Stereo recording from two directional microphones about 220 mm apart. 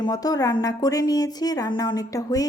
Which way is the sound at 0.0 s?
15° left (ahead or behind).